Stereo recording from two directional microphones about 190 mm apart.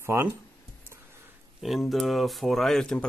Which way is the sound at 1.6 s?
Centre (ahead or behind).